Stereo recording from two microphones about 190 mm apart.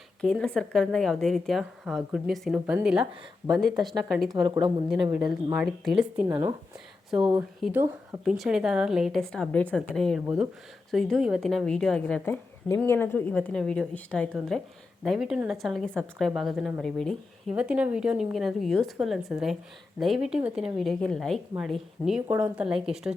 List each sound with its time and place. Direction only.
0.2 s a woman's voice: 5° left (ahead or behind)
4.4 s a woman's voice: 20° right (ahead or behind)
5.5 s a woman's voice: 5° right (ahead or behind)
6.2 s a woman's voice: 25° right (ahead or behind)
7.6 s a woman's voice: 10° right (ahead or behind)